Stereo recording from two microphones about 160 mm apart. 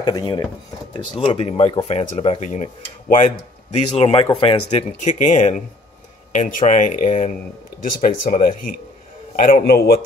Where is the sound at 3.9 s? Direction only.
35° left (ahead or behind).